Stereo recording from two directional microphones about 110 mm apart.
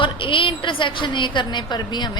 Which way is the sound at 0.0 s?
50° left (ahead or behind).